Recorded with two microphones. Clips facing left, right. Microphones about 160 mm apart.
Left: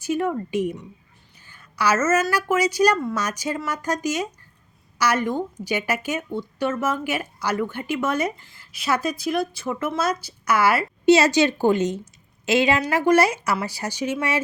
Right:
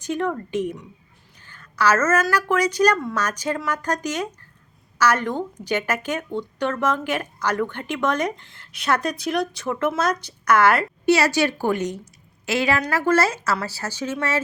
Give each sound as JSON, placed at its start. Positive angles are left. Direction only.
{"t": 0.0, "sound": "speech", "side_deg": 5}
{"t": 11.0, "sound": "a woman's voice", "side_deg": 20}